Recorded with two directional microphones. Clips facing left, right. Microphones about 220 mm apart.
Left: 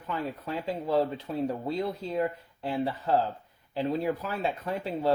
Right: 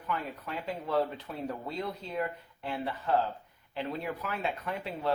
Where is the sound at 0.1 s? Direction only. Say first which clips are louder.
Left 3 dB; 30° left (ahead or behind).